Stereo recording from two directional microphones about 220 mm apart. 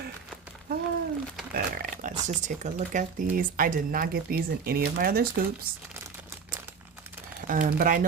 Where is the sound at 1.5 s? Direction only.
40° right (ahead or behind).